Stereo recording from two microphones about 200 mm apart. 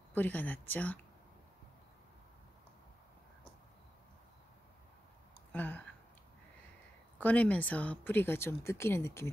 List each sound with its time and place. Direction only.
0.1 s speech: 10° left (ahead or behind)
5.5 s a sound: 10° left (ahead or behind)
7.2 s speech: 5° left (ahead or behind)